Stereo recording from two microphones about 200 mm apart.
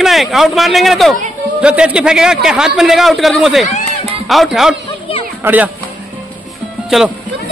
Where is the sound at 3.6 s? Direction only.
35° left (ahead or behind).